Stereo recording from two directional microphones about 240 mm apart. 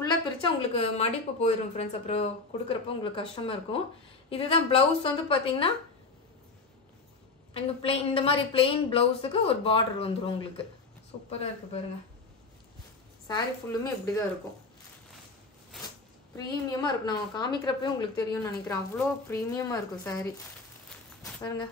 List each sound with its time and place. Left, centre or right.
0.0 s a woman's voice: centre
7.5 s a woman's voice: left
13.3 s a woman's voice: centre
16.3 s a woman's voice: centre